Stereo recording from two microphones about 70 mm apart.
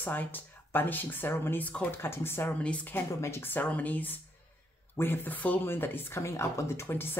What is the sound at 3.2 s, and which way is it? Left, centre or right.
Speech, left.